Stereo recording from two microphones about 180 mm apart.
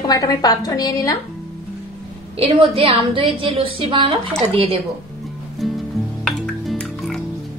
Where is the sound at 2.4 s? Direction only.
30° right (ahead or behind).